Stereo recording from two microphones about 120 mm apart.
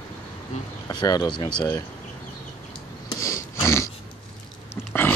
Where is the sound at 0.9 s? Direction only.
35° left (ahead or behind).